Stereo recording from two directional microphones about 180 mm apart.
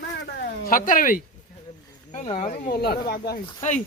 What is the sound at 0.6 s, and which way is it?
Speech, 50° left (ahead or behind).